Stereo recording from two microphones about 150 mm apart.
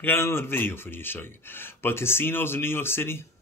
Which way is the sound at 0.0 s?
15° left (ahead or behind).